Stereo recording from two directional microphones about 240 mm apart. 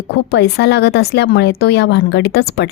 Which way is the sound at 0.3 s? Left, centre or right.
Left.